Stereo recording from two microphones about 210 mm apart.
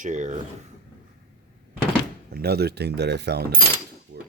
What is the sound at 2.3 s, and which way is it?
Speech, 50° right (ahead or behind).